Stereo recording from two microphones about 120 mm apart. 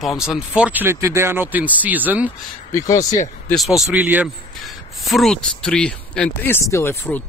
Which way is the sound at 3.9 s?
15° right (ahead or behind).